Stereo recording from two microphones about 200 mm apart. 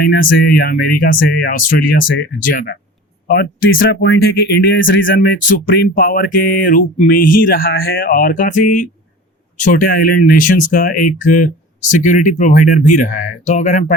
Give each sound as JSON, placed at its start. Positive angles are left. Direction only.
{"t": 0.0, "sound": "speech", "side_deg": 45}